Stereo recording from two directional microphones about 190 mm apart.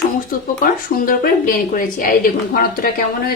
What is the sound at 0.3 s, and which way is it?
Speech, 45° left (ahead or behind).